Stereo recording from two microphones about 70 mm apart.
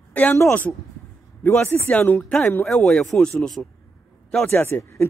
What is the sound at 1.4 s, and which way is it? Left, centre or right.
Speech, left.